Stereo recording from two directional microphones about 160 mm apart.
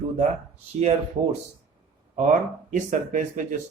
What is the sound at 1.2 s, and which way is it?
Speech, 40° right (ahead or behind).